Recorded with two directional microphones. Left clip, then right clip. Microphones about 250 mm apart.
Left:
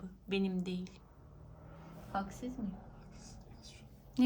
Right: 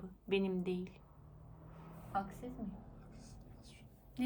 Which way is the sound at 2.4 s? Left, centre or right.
Centre.